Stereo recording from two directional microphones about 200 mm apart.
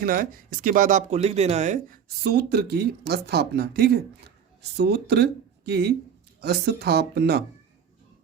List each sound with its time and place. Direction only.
0.0 s speech: 45° right (ahead or behind)